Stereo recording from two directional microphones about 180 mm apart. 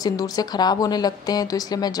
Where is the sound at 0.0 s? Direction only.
20° left (ahead or behind).